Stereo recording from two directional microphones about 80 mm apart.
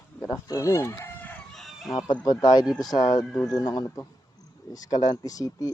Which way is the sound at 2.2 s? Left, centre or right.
Left.